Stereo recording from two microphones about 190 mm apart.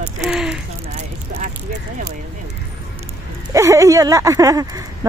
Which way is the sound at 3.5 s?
15° right (ahead or behind).